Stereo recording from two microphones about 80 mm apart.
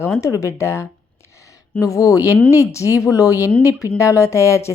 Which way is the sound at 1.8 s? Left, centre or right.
Left.